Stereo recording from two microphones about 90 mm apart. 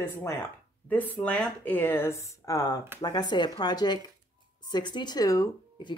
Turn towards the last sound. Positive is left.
turn(degrees=55)  # may be behind; listen again after turning